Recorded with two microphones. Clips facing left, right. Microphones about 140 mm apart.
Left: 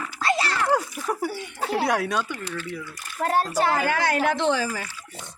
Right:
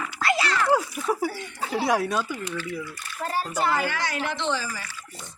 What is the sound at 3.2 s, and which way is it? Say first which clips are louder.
Speech: left 6 dB; 70° left (ahead or behind).